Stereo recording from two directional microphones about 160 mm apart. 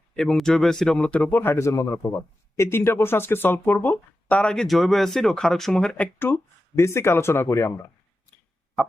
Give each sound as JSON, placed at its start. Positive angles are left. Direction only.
{"t": 0.2, "sound": "speech", "side_deg": 5}